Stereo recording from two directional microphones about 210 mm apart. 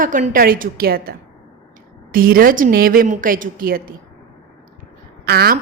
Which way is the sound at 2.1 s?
45° right (ahead or behind).